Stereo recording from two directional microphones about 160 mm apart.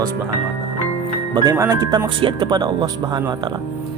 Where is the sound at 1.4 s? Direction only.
20° right (ahead or behind).